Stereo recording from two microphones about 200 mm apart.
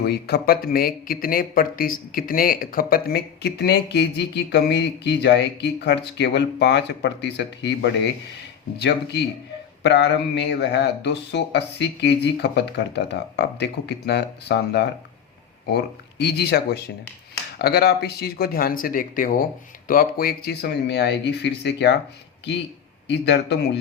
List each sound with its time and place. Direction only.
0.0 s speech: 55° left (ahead or behind)
23.0 s speech: 60° left (ahead or behind)